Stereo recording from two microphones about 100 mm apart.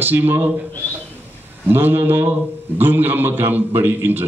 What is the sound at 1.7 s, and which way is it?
A man's voice, 20° right (ahead or behind).